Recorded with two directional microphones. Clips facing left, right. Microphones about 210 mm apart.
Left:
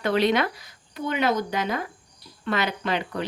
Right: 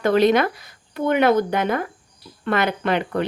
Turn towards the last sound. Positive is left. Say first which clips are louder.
# right 6 dB
turn(degrees=-55)  # may be behind; listen again after turning